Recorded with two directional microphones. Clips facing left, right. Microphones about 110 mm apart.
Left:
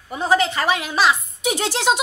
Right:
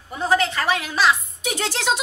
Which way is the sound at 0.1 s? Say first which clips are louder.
Left 2 dB; 10° left (ahead or behind).